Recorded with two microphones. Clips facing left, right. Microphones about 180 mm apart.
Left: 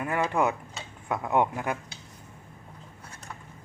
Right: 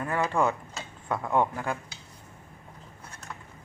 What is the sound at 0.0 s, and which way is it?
Speech, 15° left (ahead or behind).